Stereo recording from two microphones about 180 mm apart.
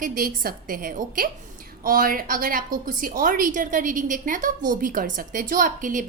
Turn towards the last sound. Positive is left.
turn(degrees=-45)  # may be behind; listen again after turning